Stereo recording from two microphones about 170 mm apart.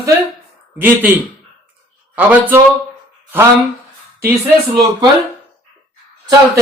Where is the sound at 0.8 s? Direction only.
10° right (ahead or behind).